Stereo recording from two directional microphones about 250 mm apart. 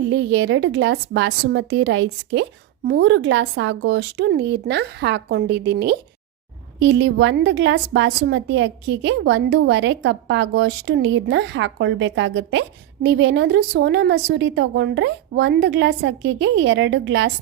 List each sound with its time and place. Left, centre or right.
0.1 s a woman's voice: right